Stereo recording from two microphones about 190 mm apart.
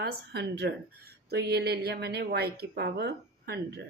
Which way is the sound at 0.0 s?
60° right (ahead or behind).